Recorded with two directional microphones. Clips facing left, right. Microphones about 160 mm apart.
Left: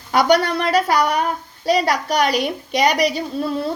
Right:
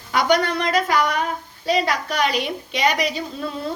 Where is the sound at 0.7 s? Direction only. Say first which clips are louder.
Left 4 dB; 35° left (ahead or behind).